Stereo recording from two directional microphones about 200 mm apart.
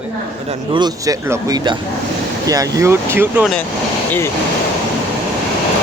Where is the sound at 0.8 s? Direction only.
15° right (ahead or behind).